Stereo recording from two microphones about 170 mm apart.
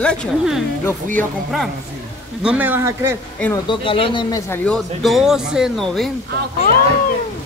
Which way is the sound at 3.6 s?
30° left (ahead or behind).